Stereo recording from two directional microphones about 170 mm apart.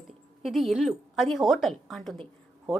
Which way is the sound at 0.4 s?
Centre (ahead or behind).